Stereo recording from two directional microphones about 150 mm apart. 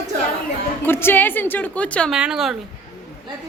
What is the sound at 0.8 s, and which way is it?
A woman's voice, 15° left (ahead or behind).